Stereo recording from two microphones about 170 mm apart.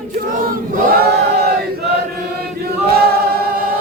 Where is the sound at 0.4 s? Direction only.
60° right (ahead or behind).